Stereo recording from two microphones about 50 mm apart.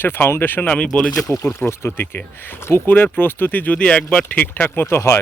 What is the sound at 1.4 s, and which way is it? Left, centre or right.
Speech, left.